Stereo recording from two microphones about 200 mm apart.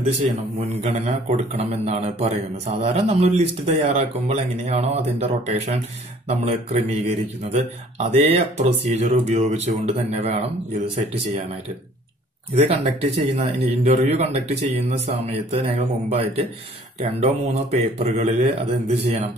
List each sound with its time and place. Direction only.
0.8 s a man's voice: 35° right (ahead or behind)
12.5 s a man's voice: 30° right (ahead or behind)